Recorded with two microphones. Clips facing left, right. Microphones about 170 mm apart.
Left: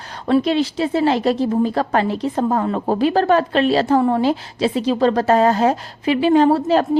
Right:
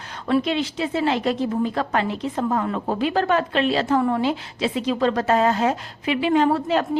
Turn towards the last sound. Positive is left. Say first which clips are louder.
# left 5 dB
turn(degrees=35)  # may be behind; listen again after turning